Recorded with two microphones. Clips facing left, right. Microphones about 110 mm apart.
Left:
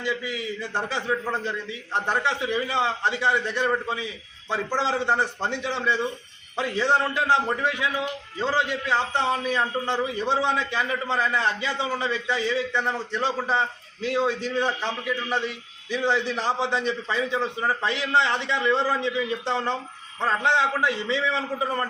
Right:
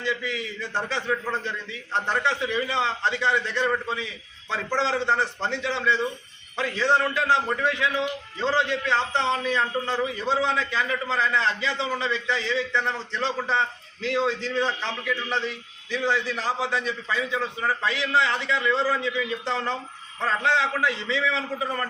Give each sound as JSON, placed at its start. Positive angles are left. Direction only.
{"t": 0.0, "sound": "a man's voice", "side_deg": 15}